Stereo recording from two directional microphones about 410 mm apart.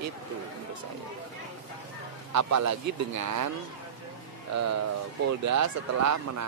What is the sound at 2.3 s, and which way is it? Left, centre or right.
A man's voice, right.